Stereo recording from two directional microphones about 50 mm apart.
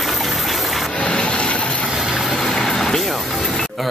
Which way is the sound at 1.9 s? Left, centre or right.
Centre.